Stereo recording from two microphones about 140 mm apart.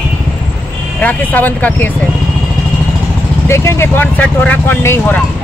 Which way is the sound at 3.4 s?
20° left (ahead or behind).